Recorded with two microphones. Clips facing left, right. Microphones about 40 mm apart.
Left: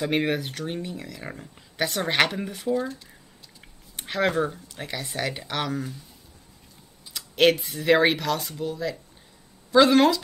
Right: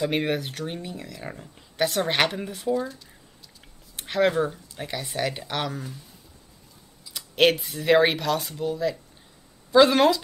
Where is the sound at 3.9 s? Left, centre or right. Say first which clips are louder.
Right 3 dB; centre.